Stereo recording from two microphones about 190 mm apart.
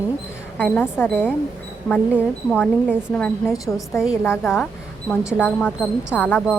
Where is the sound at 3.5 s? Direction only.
15° left (ahead or behind).